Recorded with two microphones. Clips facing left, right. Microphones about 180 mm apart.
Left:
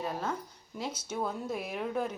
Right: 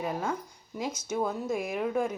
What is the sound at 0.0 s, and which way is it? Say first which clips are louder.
Speech: right 3 dB; 10° right (ahead or behind).